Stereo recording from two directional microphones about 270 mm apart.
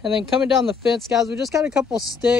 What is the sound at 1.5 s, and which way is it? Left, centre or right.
Speech, centre.